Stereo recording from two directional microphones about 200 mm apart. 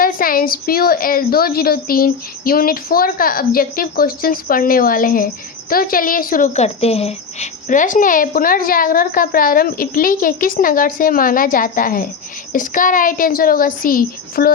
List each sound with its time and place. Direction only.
0.0 s a woman's voice: 45° left (ahead or behind)